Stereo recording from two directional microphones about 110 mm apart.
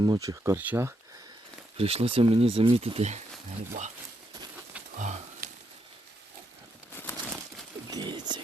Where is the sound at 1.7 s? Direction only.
60° right (ahead or behind); by 3.2 s 90° right.